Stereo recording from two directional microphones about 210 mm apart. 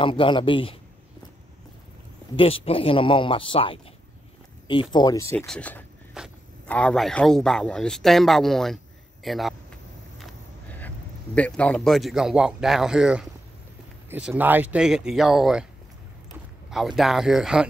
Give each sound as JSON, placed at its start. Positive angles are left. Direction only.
{"t": 0.0, "sound": "speech", "side_deg": 25}
{"t": 2.3, "sound": "speech", "side_deg": 25}
{"t": 4.9, "sound": "speech", "side_deg": 20}
{"t": 5.5, "sound": "speech", "side_deg": 5}
{"t": 10.1, "sound": "vehicle", "side_deg": 5}
{"t": 11.3, "sound": "speech", "side_deg": 5}
{"t": 16.7, "sound": "speech", "side_deg": 0}